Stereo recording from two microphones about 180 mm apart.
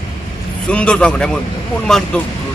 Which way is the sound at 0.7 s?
5° left (ahead or behind).